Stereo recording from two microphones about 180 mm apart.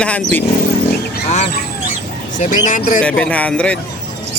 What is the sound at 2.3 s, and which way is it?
Speech, 45° left (ahead or behind).